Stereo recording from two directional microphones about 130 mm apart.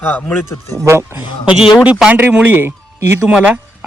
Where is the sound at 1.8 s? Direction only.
10° right (ahead or behind).